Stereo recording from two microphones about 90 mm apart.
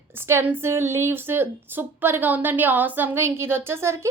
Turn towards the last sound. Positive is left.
turn(degrees=-30)  # may be behind; listen again after turning